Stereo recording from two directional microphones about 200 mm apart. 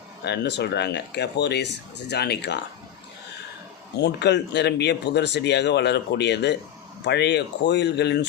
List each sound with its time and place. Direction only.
0.3 s speech: 60° left (ahead or behind)
3.9 s speech: 55° left (ahead or behind)